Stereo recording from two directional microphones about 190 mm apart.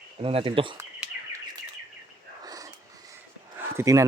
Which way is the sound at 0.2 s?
30° right (ahead or behind).